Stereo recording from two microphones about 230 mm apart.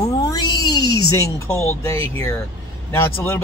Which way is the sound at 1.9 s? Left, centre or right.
Centre.